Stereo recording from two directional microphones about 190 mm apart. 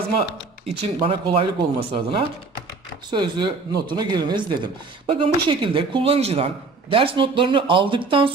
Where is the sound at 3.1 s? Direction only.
25° right (ahead or behind).